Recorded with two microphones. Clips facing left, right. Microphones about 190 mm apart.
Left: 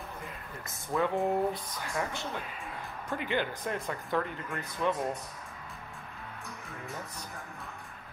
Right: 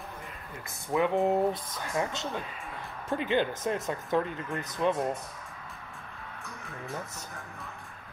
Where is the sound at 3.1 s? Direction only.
20° right (ahead or behind).